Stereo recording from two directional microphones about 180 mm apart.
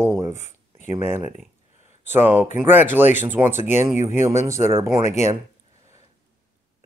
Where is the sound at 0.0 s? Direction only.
15° right (ahead or behind).